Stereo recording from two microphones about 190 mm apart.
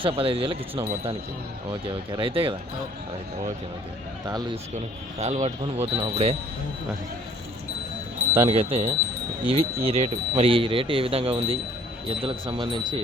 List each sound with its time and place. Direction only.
0.0 s speech: 30° right (ahead or behind)
2.0 s speech: 30° right (ahead or behind)
4.3 s speech: 20° right (ahead or behind)
5.2 s speech: 40° right (ahead or behind)
8.4 s speech: 30° right (ahead or behind)